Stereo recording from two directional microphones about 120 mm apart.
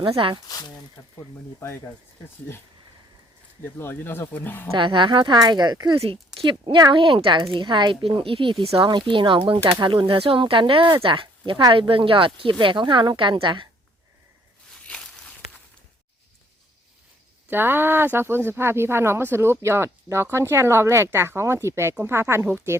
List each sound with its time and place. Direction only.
0.4 s speech: 35° left (ahead or behind)
3.6 s speech: 20° left (ahead or behind)
4.7 s speech: 45° right (ahead or behind)
6.0 s speech: 50° right (ahead or behind)
14.8 s walk: 5° left (ahead or behind)
17.5 s speech: 15° right (ahead or behind)